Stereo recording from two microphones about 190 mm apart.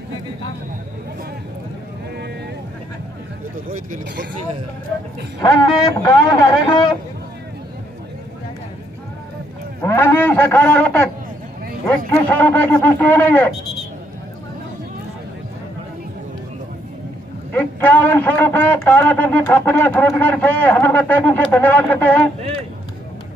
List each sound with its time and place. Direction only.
3.6 s speech: 45° right (ahead or behind)
5.4 s a man's voice: 20° left (ahead or behind)
9.8 s a sound: 10° left (ahead or behind)
12.1 s speech: 10° left (ahead or behind)
17.5 s a man's voice: 10° left (ahead or behind)